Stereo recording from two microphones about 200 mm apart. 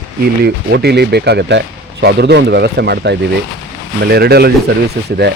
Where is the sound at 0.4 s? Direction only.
55° right (ahead or behind).